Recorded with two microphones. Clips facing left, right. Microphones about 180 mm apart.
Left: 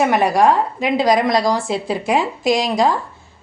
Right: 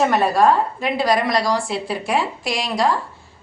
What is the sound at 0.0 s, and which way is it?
A woman's voice, 15° left (ahead or behind).